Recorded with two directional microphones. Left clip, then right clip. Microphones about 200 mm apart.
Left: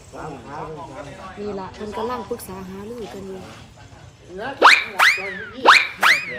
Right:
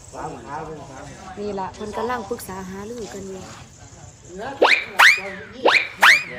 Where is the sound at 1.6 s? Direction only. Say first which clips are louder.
Right 2 dB; 25° right (ahead or behind).